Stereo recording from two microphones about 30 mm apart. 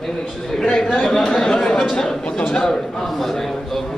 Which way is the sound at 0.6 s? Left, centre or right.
Left.